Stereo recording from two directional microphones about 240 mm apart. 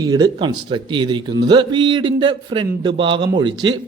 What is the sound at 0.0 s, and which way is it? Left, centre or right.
A man's voice, centre.